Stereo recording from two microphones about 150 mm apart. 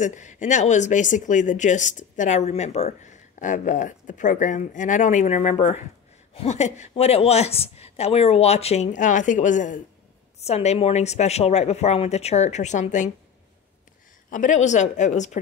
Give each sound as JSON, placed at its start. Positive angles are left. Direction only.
{"t": 0.0, "sound": "a woman's voice", "side_deg": 55}
{"t": 14.3, "sound": "a woman's voice", "side_deg": 55}